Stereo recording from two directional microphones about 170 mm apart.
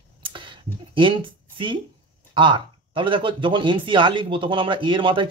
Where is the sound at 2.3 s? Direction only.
30° right (ahead or behind).